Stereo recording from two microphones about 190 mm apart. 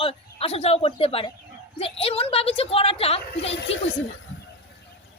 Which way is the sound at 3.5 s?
75° left (ahead or behind).